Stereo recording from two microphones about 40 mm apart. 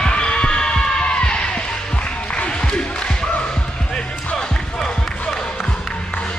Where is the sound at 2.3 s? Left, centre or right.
Left.